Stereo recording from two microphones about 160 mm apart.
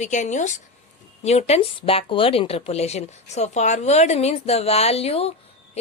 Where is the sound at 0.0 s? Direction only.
50° left (ahead or behind).